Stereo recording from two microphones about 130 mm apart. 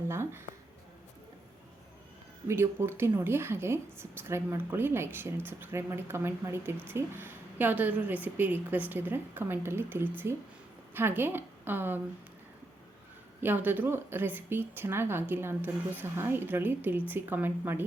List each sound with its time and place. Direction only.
0.1 s speech: 20° right (ahead or behind)
2.5 s a woman's voice: 20° right (ahead or behind)
13.4 s a woman's voice: 15° right (ahead or behind)